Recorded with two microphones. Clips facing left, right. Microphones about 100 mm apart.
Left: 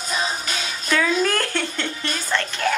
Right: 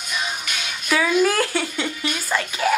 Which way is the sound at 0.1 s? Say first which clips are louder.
Left 2 dB; 30° left (ahead or behind).